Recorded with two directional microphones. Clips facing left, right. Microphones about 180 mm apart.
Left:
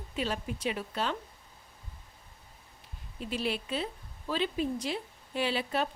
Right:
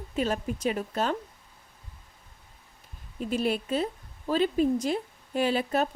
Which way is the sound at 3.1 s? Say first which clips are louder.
Right 6 dB; 45° right (ahead or behind).